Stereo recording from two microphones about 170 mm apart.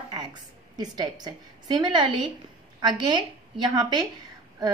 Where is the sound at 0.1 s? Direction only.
25° right (ahead or behind).